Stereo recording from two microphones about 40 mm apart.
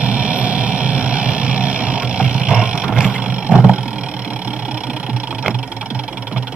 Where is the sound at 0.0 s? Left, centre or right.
Right.